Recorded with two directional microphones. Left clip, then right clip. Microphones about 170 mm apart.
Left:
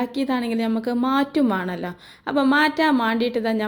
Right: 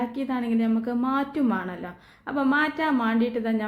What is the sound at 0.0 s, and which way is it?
A woman's voice, 40° left (ahead or behind).